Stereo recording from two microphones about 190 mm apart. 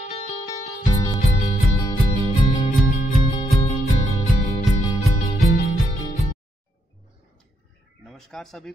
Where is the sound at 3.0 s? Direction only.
35° left (ahead or behind).